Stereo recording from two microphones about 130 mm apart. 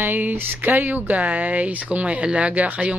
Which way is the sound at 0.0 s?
15° right (ahead or behind).